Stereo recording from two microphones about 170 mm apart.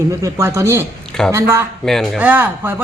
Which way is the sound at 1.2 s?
5° left (ahead or behind).